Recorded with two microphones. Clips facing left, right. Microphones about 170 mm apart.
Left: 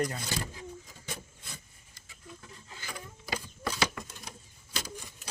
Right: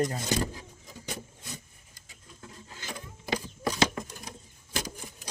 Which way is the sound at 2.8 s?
20° right (ahead or behind).